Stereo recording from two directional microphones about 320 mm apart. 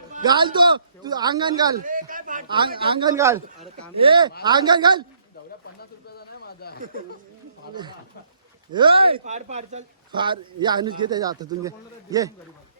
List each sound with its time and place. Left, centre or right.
0.1 s speech: centre
1.8 s a man's voice: right
5.8 s a sound: left
6.7 s speech: right
7.7 s speech: centre